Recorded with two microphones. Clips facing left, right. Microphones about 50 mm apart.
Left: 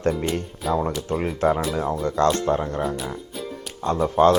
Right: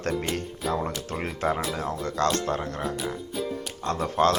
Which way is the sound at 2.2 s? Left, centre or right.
Left.